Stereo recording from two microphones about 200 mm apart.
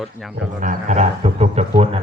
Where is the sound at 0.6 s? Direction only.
40° right (ahead or behind).